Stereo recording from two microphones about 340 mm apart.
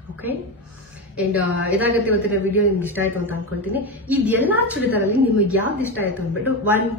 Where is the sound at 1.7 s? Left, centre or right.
Centre.